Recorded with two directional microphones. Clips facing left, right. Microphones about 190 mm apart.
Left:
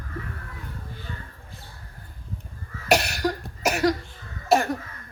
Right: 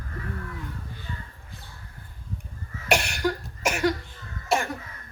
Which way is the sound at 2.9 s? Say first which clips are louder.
Left 2 dB; 40° left (ahead or behind).